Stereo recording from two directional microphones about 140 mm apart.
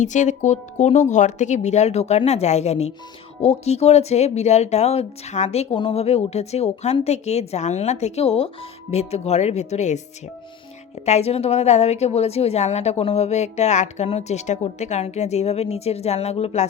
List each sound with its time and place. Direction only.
0.0 s a woman's voice: 60° left (ahead or behind)
11.0 s a woman's voice: 50° left (ahead or behind)